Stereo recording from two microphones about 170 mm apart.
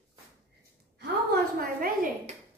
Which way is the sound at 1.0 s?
65° right (ahead or behind).